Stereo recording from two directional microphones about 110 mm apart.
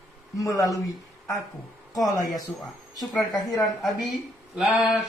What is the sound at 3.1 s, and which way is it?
Speech, centre (ahead or behind).